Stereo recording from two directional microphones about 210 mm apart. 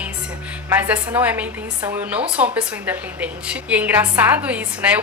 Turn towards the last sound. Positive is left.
turn(degrees=-5)  # may be behind; listen again after turning